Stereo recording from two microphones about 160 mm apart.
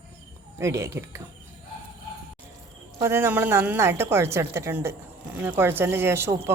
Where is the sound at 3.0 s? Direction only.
15° right (ahead or behind).